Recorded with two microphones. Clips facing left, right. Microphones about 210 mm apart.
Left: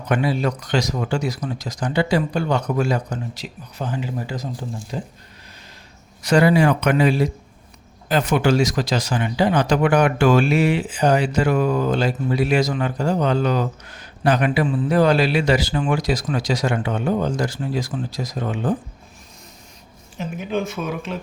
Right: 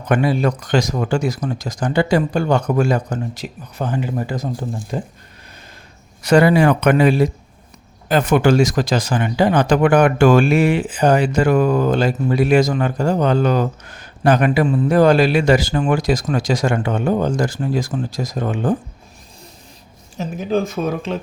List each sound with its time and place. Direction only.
0.1 s speech: 50° right (ahead or behind)
6.2 s speech: 60° right (ahead or behind)
20.1 s speech: 35° right (ahead or behind)